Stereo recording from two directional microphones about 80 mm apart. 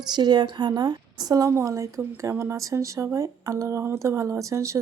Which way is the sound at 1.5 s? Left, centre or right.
Right.